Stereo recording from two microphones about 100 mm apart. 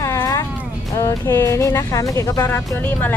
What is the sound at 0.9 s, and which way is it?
Music, 35° left (ahead or behind).